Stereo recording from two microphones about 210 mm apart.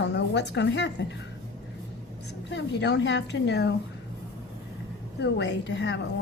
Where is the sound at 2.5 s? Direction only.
55° left (ahead or behind).